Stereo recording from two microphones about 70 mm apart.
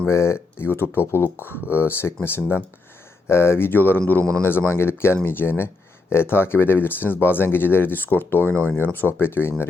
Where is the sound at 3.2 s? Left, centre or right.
Left.